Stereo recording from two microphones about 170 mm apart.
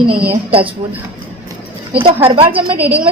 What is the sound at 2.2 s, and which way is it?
Speech, 30° right (ahead or behind).